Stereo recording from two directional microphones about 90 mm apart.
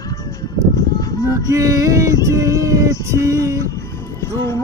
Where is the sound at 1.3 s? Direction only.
40° right (ahead or behind).